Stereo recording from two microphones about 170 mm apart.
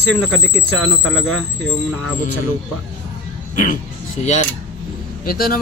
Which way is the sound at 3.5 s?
50° left (ahead or behind).